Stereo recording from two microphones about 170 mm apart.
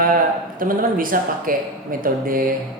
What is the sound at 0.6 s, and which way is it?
A man's voice, 55° right (ahead or behind).